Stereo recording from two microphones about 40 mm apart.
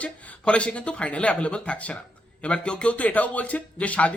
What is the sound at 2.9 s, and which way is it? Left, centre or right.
Speech, left.